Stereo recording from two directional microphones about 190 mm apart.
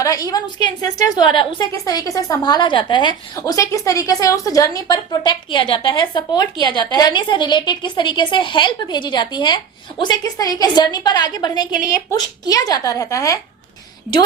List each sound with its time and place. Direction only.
0.0 s a woman's voice: 20° left (ahead or behind)